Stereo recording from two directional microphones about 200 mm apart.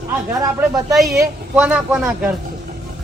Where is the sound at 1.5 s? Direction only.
5° right (ahead or behind).